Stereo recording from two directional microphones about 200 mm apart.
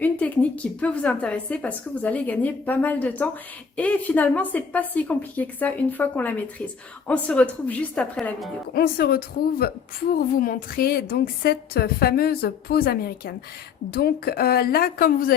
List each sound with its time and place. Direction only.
0.0 s a woman's voice: 5° left (ahead or behind)
8.7 s a woman's voice: 50° left (ahead or behind)